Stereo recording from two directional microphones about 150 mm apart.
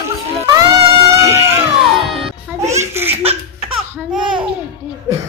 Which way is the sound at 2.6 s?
20° right (ahead or behind).